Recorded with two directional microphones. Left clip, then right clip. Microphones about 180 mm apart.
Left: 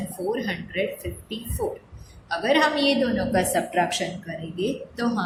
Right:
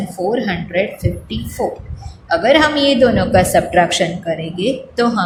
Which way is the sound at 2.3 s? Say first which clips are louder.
Right 9 dB; 35° right (ahead or behind).